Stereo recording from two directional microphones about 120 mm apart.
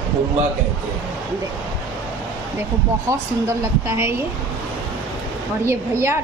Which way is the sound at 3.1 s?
25° right (ahead or behind).